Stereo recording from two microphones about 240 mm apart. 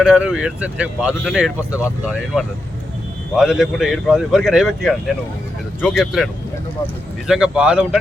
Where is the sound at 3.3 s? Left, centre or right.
Centre.